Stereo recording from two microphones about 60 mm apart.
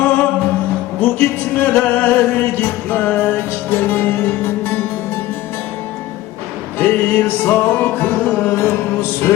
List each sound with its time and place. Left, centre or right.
0.0 s music: left
6.7 s music: left